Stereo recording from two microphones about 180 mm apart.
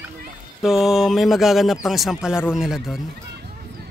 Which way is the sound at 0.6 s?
Centre (ahead or behind).